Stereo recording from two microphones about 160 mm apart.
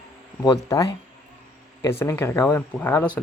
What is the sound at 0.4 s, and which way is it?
Speech, 20° left (ahead or behind).